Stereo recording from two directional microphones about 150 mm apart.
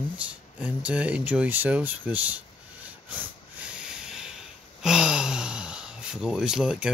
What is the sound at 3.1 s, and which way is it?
Snort, 10° right (ahead or behind).